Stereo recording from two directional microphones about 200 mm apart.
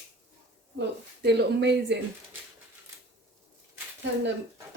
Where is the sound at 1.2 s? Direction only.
60° right (ahead or behind).